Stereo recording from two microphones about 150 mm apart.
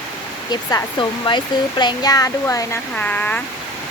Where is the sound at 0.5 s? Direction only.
25° left (ahead or behind).